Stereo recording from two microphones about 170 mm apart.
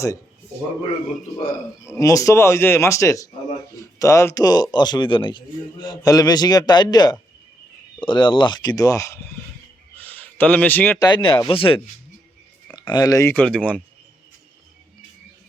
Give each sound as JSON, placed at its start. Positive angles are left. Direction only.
{"t": 2.0, "sound": "speech", "side_deg": 20}
{"t": 10.0, "sound": "a sound", "side_deg": 10}
{"t": 11.0, "sound": "speech", "side_deg": 25}
{"t": 13.3, "sound": "speech", "side_deg": 5}